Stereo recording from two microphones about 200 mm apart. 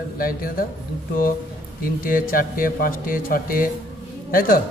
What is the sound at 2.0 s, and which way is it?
Speech, 45° left (ahead or behind).